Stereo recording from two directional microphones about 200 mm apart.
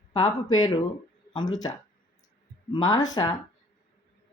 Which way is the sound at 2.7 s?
20° left (ahead or behind).